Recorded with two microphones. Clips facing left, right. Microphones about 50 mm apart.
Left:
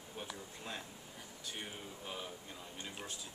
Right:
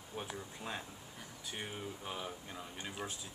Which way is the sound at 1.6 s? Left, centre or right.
Centre.